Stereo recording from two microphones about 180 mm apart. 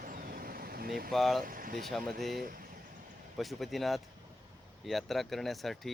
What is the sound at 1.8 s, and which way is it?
Speech, centre (ahead or behind).